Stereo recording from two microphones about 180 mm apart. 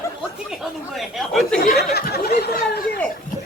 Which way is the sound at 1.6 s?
60° left (ahead or behind).